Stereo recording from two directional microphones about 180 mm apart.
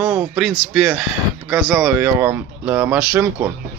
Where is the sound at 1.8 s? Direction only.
10° right (ahead or behind).